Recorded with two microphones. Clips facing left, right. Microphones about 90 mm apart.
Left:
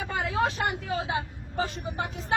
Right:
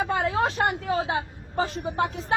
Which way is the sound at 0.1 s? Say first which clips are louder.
Right 3 dB; 40° right (ahead or behind).